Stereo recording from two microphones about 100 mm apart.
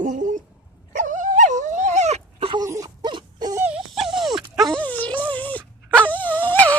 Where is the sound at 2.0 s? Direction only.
90° right.